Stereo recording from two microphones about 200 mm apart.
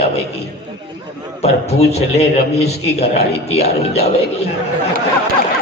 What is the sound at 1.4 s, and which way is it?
A man's voice, 30° left (ahead or behind).